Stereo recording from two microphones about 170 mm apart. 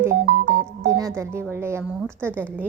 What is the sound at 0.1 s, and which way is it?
Music, 60° right (ahead or behind).